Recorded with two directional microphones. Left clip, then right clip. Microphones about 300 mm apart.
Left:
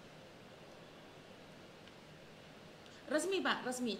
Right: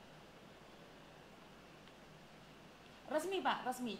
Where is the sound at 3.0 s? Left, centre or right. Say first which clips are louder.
Left 2 dB; centre.